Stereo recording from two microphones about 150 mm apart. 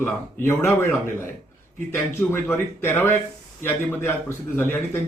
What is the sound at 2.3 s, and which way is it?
A man's voice, 15° left (ahead or behind).